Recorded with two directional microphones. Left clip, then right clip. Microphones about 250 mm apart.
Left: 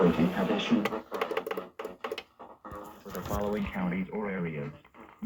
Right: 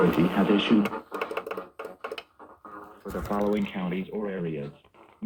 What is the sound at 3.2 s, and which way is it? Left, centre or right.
Speech, right.